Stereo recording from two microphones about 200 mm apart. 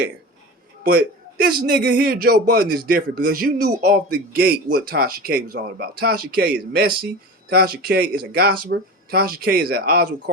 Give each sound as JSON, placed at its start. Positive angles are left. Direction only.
{"t": 0.9, "sound": "a man's voice", "side_deg": -50}